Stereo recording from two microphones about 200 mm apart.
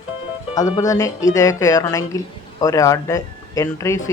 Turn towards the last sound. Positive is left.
turn(degrees=15)  # may be behind; listen again after turning